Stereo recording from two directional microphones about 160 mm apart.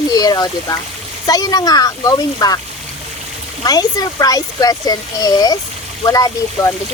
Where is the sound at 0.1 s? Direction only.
25° left (ahead or behind).